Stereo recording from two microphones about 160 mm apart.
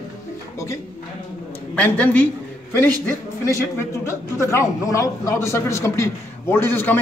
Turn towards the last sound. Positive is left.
turn(degrees=10)  # may be behind; listen again after turning